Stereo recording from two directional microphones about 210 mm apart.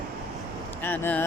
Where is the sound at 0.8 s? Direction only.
10° left (ahead or behind).